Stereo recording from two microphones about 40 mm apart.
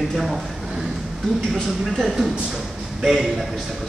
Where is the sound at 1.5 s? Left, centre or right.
Centre.